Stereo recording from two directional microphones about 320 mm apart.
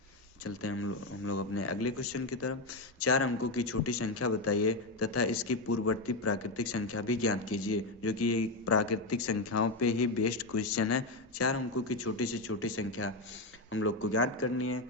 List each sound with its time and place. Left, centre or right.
0.4 s speech: left